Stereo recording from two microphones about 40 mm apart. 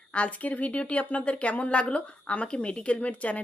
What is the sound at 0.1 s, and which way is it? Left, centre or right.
Speech, left.